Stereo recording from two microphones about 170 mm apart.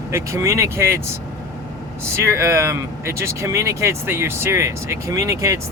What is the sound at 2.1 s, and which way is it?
Speech, 15° right (ahead or behind).